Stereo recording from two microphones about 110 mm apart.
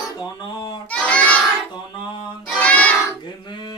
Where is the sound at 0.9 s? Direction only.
10° left (ahead or behind).